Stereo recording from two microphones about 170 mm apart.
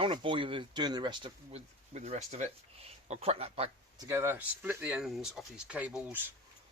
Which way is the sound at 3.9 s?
15° right (ahead or behind).